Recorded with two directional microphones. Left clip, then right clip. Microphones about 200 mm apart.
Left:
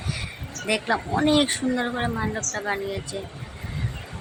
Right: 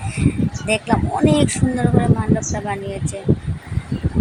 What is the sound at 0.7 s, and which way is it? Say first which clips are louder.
Speech: right 4 dB; centre (ahead or behind).